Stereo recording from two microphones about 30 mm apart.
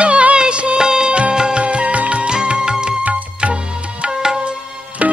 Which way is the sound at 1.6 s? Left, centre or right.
Right.